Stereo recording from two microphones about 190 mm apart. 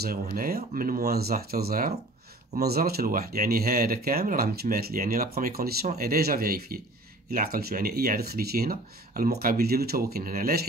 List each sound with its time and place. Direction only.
0.0 s speech: 50° right (ahead or behind)